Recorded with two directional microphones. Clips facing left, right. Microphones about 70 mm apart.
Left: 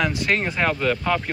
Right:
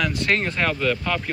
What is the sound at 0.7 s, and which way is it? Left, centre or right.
Speech, left.